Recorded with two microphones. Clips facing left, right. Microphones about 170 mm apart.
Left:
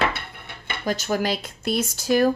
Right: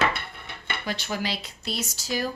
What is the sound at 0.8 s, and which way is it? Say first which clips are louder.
Speech: left 7 dB; 45° left (ahead or behind).